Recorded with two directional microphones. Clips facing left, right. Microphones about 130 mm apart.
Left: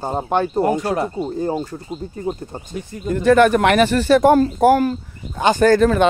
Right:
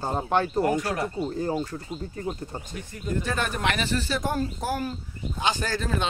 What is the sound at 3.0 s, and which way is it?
Speech, 70° left (ahead or behind).